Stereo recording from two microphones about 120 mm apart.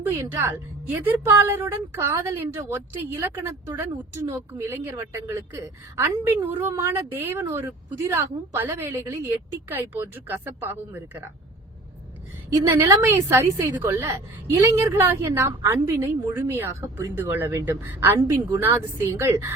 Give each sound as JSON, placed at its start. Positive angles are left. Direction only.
{"t": 0.0, "sound": "a woman's voice", "side_deg": -20}
{"t": 12.5, "sound": "a woman's voice", "side_deg": -25}